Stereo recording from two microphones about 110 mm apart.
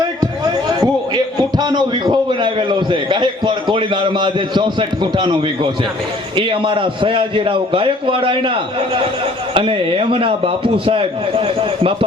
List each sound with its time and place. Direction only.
0.2 s a man's voice: 35° right (ahead or behind); by 12.0 s 55° right (ahead or behind)